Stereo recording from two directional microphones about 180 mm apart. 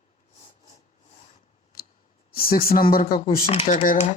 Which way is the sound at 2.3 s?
55° left (ahead or behind).